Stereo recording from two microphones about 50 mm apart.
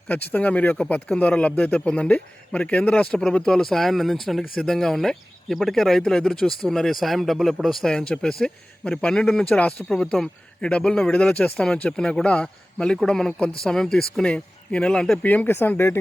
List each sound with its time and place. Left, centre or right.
0.3 s a man's voice: left; by 6.0 s centre
6.0 s speech: centre
7.9 s a man's voice: centre
11.5 s speech: centre
12.2 s a man's voice: left
13.1 s speech: centre
15.2 s speech: left
15.4 s speech: left